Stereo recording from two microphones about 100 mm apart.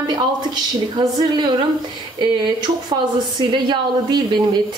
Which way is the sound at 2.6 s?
50° right (ahead or behind).